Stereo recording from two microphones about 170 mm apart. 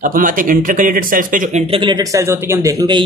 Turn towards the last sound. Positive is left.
turn(degrees=-25)  # may be behind; listen again after turning